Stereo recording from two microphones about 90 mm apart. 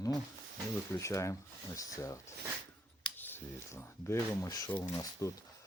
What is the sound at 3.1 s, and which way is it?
Speech, 25° left (ahead or behind).